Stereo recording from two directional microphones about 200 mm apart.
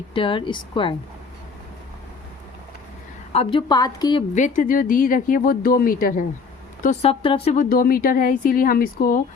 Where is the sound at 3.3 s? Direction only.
30° left (ahead or behind).